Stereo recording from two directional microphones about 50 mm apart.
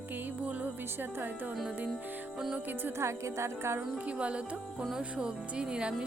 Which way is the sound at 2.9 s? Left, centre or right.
Right.